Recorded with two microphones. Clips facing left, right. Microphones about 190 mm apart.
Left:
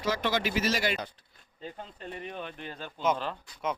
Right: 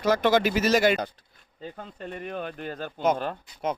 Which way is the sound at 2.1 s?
50° right (ahead or behind).